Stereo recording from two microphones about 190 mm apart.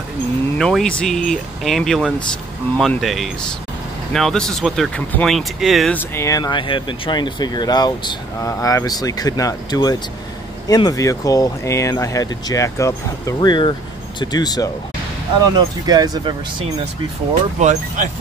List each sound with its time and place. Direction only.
0.6 s speech: 5° left (ahead or behind)
5.9 s speech: 15° left (ahead or behind)
15.5 s speech: 20° right (ahead or behind)
17.3 s speech: 40° right (ahead or behind)